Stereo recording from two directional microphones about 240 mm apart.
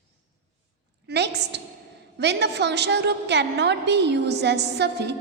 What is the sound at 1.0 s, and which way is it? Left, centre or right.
A woman's voice, right.